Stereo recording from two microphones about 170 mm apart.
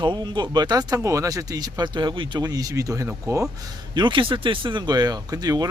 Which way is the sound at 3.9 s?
30° right (ahead or behind).